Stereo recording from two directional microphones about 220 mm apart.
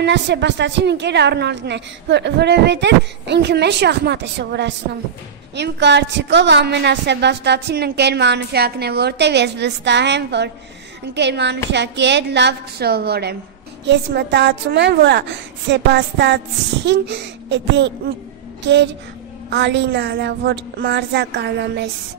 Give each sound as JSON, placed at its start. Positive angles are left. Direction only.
{"t": 0.0, "sound": "a woman's voice", "side_deg": -50}
{"t": 18.6, "sound": "a sound", "side_deg": -55}
{"t": 19.5, "sound": "a woman's voice", "side_deg": -55}